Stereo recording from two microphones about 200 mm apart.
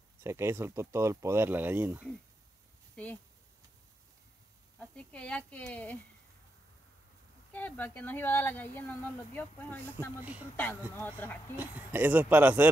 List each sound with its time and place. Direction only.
0.2 s speech: 15° right (ahead or behind)
4.7 s speech: 5° left (ahead or behind)
7.5 s speech: 10° left (ahead or behind)
11.5 s speech: 10° right (ahead or behind)